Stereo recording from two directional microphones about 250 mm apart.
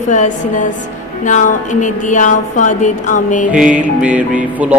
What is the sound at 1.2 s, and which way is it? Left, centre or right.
Speech, left.